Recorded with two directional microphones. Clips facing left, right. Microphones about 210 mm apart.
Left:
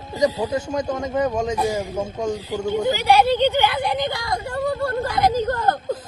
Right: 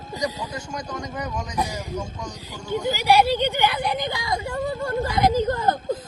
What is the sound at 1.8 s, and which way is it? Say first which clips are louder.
Speech: left 6 dB; 50° left (ahead or behind).